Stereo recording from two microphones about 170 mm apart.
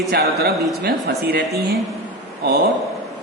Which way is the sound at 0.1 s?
65° right (ahead or behind).